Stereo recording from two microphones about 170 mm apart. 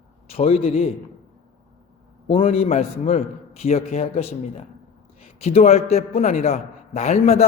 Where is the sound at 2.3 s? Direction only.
35° left (ahead or behind).